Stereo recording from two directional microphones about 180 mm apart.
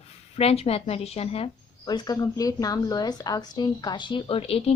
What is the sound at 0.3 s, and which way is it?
A woman's voice, 35° left (ahead or behind).